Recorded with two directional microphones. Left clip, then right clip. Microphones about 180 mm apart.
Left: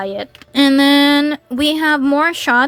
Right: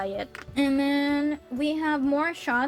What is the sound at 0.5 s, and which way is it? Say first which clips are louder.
Speech: left 13 dB; 55° left (ahead or behind).